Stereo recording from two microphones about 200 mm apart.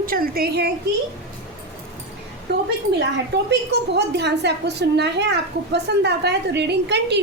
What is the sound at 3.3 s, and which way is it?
A woman's voice, 60° right (ahead or behind).